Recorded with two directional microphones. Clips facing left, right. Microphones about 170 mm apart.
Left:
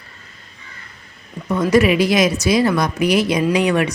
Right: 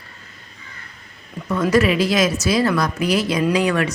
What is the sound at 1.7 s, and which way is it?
A woman's voice, 15° left (ahead or behind).